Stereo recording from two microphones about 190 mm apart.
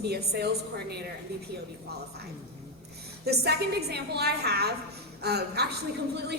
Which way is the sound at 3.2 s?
60° right (ahead or behind).